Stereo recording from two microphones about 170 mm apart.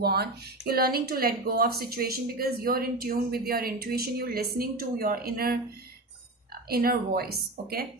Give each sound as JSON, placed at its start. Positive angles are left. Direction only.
{"t": 0.0, "sound": "speech", "side_deg": -70}